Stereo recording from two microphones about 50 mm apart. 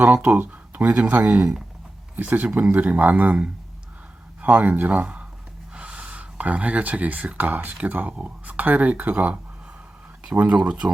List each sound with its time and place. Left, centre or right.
0.0 s speech: right
0.3 s a sound: right
0.9 s speech: right
10.4 s speech: right